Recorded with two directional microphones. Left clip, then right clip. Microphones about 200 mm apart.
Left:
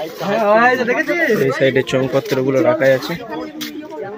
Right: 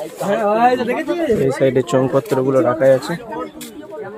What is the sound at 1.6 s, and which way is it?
Speech, 10° right (ahead or behind).